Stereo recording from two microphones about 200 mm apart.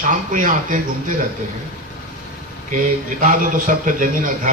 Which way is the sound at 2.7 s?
45° right (ahead or behind).